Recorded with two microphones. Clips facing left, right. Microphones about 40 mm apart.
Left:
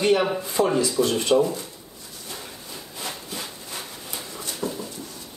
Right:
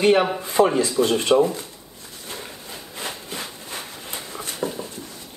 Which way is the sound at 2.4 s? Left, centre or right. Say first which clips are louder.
Right 2 dB; right.